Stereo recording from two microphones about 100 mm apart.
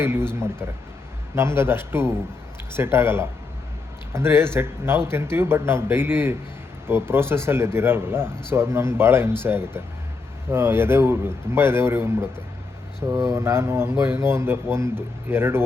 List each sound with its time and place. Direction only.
0.0 s speech: 25° right (ahead or behind)
1.4 s speech: 25° right (ahead or behind)